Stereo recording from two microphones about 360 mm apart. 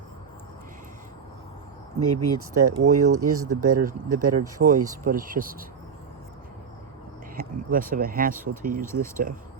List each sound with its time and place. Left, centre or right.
2.0 s speech: right
5.0 s speech: right
7.3 s speech: right